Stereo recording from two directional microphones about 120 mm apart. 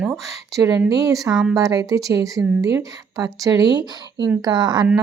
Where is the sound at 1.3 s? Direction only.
5° right (ahead or behind).